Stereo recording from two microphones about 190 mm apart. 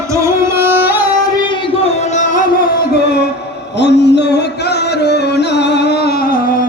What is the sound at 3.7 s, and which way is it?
Music, 65° left (ahead or behind).